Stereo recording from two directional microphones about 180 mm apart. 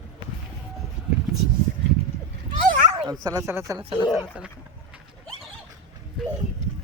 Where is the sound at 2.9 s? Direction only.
25° right (ahead or behind).